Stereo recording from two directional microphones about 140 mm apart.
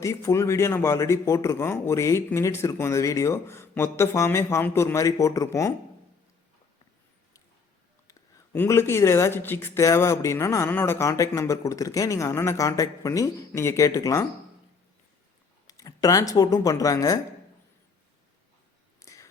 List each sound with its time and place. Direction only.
0.0 s a man's voice: 20° left (ahead or behind)
8.5 s a man's voice: 15° left (ahead or behind)
15.6 s speech: 25° left (ahead or behind)
18.9 s a sound: 25° left (ahead or behind)